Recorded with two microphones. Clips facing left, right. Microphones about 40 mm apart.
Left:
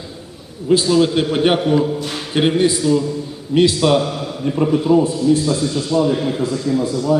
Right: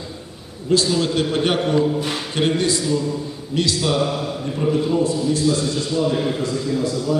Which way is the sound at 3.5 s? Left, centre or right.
Left.